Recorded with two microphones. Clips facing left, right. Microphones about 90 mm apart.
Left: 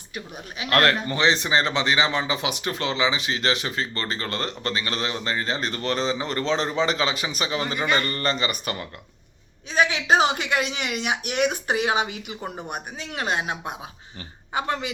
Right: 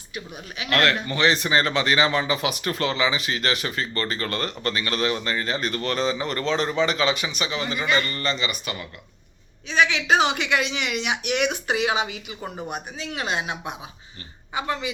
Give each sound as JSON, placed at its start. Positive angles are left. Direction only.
{"t": 0.6, "sound": "speech", "side_deg": 35}